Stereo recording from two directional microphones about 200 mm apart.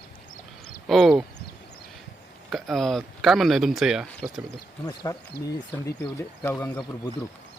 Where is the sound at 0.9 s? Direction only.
Centre (ahead or behind).